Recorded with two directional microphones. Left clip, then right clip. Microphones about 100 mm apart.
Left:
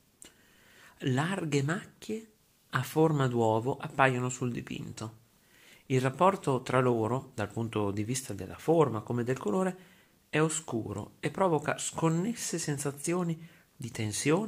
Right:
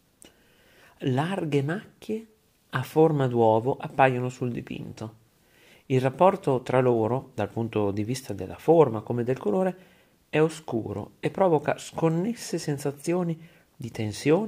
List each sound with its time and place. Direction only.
0.7 s speech: 30° right (ahead or behind)
1.6 s speech: 20° right (ahead or behind)
4.2 s speech: 20° right (ahead or behind)
5.7 s speech: 35° right (ahead or behind)
11.1 s speech: 35° right (ahead or behind)